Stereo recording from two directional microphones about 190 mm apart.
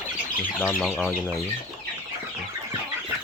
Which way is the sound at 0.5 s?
5° left (ahead or behind).